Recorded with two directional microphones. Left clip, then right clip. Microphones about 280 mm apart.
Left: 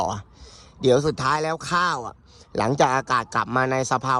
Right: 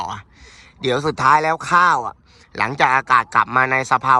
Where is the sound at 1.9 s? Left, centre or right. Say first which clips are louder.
Right 9 dB; centre.